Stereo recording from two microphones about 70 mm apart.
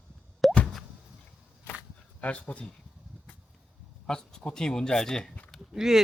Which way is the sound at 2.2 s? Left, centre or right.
Centre.